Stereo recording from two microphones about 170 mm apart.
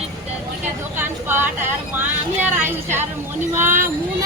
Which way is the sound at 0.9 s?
10° right (ahead or behind).